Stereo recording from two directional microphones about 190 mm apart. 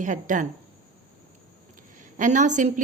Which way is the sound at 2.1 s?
40° right (ahead or behind).